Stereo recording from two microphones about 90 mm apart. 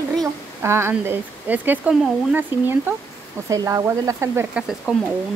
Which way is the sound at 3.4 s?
40° right (ahead or behind).